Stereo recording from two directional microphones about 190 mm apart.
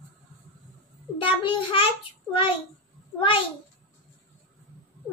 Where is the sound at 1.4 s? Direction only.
25° left (ahead or behind).